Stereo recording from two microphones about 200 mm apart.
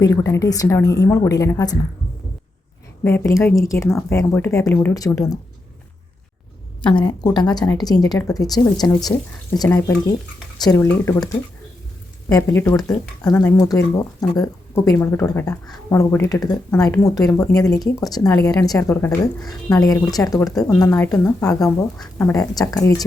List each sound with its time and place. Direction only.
0.0 s speech: 15° left (ahead or behind)
3.0 s speech: 15° left (ahead or behind)
6.9 s speech: 20° left (ahead or behind)
12.3 s speech: 15° left (ahead or behind)